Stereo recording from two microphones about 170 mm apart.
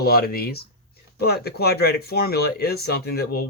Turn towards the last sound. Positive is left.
turn(degrees=65)  # may be behind; listen again after turning